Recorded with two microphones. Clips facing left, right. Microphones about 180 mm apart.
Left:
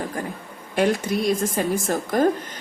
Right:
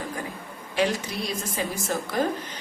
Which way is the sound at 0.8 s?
50° left (ahead or behind).